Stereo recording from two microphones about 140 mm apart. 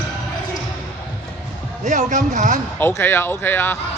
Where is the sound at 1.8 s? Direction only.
60° right (ahead or behind).